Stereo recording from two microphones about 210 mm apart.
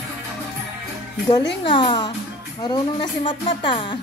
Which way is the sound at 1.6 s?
25° left (ahead or behind).